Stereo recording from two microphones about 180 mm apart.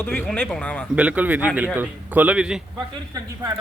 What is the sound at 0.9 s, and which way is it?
A man's voice, 10° right (ahead or behind).